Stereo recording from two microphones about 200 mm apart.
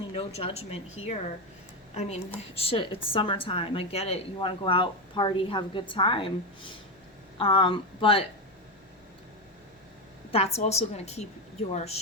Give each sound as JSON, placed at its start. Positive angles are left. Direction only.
{"t": 0.1, "sound": "a woman's voice", "side_deg": 30}
{"t": 10.3, "sound": "speech", "side_deg": 30}